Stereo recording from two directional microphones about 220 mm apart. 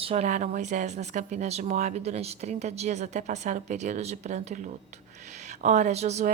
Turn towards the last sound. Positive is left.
turn(degrees=-30)  # may be behind; listen again after turning